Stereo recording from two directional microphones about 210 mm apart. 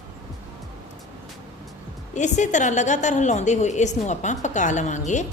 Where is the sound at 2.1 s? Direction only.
35° left (ahead or behind).